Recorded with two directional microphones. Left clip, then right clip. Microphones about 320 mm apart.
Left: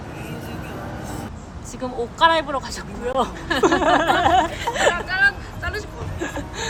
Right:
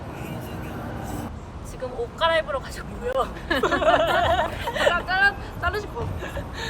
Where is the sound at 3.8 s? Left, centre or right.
Centre.